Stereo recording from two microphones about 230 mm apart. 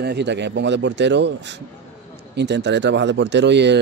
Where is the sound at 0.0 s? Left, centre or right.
Right.